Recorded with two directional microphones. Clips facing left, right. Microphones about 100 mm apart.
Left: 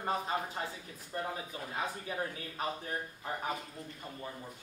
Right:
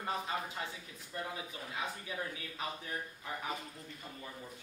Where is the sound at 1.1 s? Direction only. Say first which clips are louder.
Left 4 dB; 40° left (ahead or behind).